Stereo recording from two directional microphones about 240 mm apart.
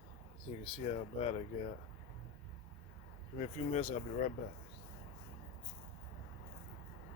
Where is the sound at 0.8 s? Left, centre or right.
Left.